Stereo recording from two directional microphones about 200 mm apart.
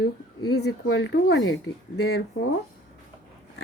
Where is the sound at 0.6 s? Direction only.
65° left (ahead or behind).